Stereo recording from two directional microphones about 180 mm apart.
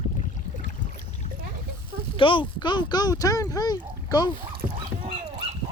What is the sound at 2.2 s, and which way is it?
Speech, 30° left (ahead or behind).